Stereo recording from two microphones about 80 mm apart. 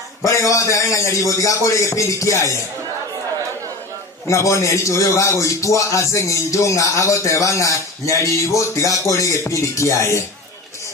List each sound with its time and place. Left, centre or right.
0.2 s a man's voice: left
4.3 s speech: left